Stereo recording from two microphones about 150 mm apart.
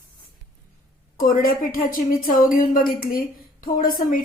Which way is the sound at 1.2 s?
65° left (ahead or behind).